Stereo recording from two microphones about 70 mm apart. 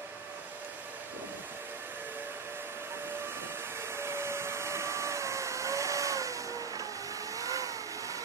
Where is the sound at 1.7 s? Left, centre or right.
Right.